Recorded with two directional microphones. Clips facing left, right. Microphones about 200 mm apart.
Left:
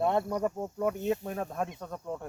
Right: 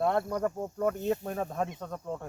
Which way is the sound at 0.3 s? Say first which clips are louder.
Even; 10° left (ahead or behind).